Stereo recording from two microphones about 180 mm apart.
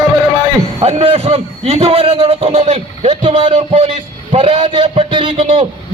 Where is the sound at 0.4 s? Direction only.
35° right (ahead or behind).